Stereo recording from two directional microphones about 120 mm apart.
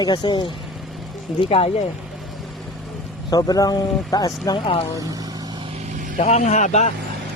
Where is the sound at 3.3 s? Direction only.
30° left (ahead or behind).